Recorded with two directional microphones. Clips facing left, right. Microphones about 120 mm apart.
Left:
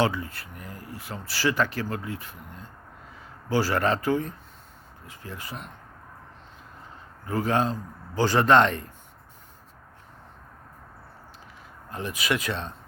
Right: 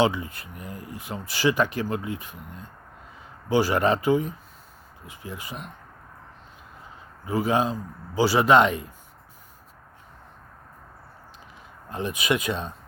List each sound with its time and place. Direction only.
0.0 s a man's voice: 20° right (ahead or behind)
7.3 s a man's voice: 10° right (ahead or behind)
11.9 s speech: 20° right (ahead or behind)